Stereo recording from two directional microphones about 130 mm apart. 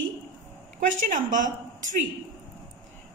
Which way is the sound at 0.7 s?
85° right.